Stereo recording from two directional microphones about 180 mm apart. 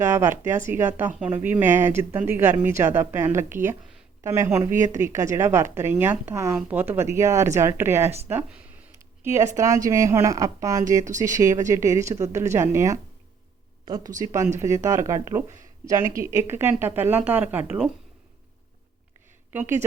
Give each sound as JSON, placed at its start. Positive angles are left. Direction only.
{"t": 0.0, "sound": "speech", "side_deg": -15}